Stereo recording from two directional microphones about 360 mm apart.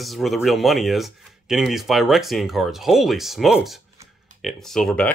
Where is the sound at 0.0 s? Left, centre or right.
Centre.